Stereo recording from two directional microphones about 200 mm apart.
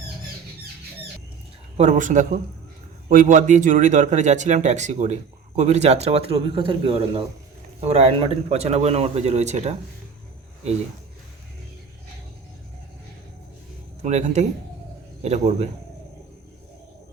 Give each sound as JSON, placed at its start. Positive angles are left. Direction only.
{"t": 1.8, "sound": "a man's voice", "side_deg": -40}
{"t": 14.0, "sound": "a man's voice", "side_deg": -35}